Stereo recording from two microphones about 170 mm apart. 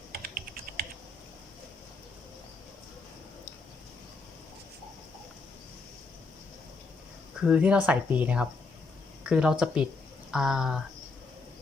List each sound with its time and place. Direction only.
0.1 s typing: 55° right (ahead or behind)
7.4 s speech: 5° right (ahead or behind)